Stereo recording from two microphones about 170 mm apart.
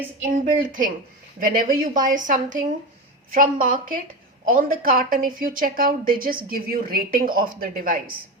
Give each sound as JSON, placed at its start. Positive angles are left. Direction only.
{"t": 0.3, "sound": "a woman's voice", "side_deg": -55}